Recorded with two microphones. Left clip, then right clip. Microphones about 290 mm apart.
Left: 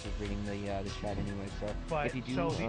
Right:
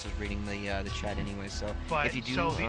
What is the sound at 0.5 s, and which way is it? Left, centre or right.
Speech, right.